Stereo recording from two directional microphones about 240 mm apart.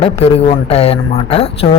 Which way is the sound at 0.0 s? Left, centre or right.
Left.